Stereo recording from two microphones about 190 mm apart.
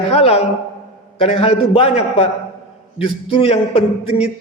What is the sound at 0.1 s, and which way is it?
A man's voice, 30° left (ahead or behind).